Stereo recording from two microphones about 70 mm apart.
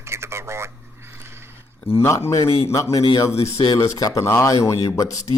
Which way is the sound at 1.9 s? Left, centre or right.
Left.